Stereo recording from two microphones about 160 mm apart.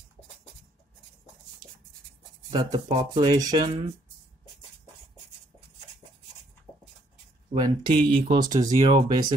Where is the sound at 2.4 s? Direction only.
30° right (ahead or behind).